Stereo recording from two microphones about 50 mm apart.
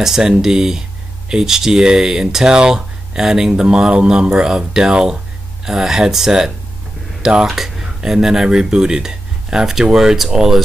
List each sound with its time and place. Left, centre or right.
0.0 s speech: centre